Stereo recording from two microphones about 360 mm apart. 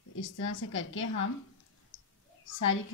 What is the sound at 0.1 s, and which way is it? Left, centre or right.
A woman's voice, left.